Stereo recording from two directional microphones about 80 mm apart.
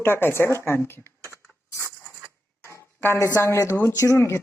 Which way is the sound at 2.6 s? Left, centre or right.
Left.